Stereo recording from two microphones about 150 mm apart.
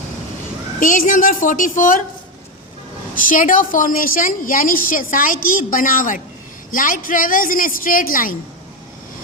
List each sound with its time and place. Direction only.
0.8 s a woman's voice: 60° left (ahead or behind)
3.2 s a woman's voice: 65° left (ahead or behind)